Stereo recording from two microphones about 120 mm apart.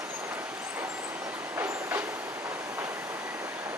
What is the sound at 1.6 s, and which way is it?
Train, 15° right (ahead or behind).